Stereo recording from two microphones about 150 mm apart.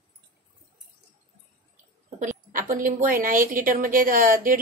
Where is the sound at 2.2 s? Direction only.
60° right (ahead or behind).